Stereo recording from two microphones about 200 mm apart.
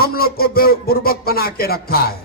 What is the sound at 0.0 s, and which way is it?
A man's voice, 50° left (ahead or behind).